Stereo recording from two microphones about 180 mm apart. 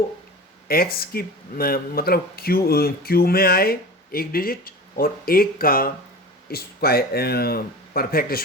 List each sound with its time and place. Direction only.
0.7 s speech: 55° left (ahead or behind)